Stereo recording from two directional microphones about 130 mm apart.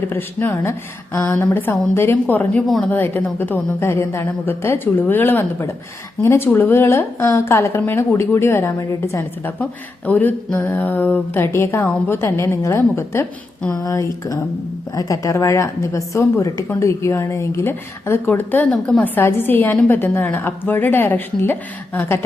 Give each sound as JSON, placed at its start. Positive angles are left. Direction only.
{"t": 0.1, "sound": "a woman's voice", "side_deg": 15}